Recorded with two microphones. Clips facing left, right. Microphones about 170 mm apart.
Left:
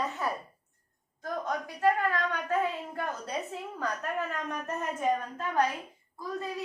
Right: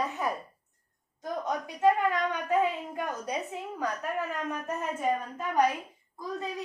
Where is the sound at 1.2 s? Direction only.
20° right (ahead or behind).